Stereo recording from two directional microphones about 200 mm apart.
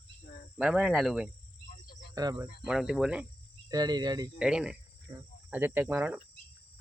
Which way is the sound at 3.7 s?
20° right (ahead or behind).